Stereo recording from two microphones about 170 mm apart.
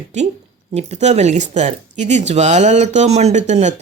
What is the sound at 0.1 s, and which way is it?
Speech, 40° right (ahead or behind).